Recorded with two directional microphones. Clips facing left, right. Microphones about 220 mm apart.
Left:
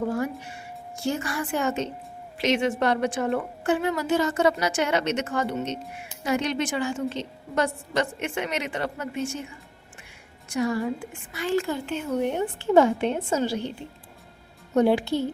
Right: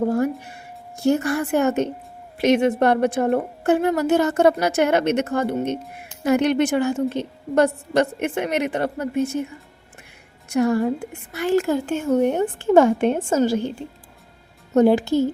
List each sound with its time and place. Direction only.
0.0 s speech: 40° right (ahead or behind)
1.0 s a woman's voice: 60° right (ahead or behind)
10.5 s a woman's voice: 65° right (ahead or behind)
10.8 s a woman's voice: 45° right (ahead or behind)